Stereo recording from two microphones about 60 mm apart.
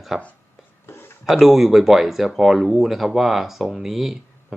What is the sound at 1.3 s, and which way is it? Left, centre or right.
Speech, centre.